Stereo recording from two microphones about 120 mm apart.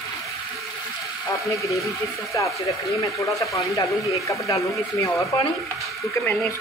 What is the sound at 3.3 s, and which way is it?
Speech, 25° left (ahead or behind).